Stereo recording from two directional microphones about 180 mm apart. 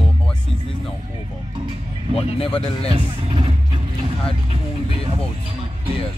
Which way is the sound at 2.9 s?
25° right (ahead or behind).